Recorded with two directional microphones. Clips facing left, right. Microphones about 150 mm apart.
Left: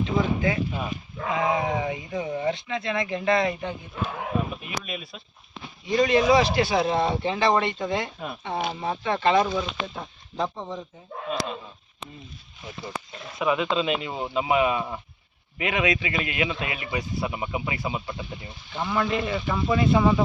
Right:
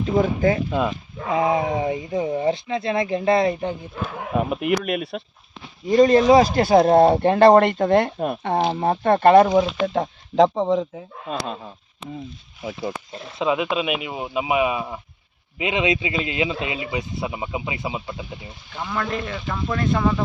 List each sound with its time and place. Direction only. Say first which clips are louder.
0.0 s speech: right 5 dB; 40° right (ahead or behind)
0.7 s speech: right 9 dB; 90° right
1.3 s speech: right 4 dB; 30° right (ahead or behind)
4.4 s speech: right 12 dB; 70° right (ahead or behind)
5.8 s speech: right 6 dB; 45° right (ahead or behind)
9.8 s speech: right 13 dB; 75° right (ahead or behind); by 10.8 s 90° right
13.4 s speech: right 2 dB; 20° right (ahead or behind)
15.5 s speech: right 3 dB; 20° right (ahead or behind)
18.8 s speech: left 1 dB; 5° left (ahead or behind)